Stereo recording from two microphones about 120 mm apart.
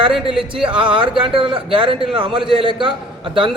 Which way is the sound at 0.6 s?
45° right (ahead or behind).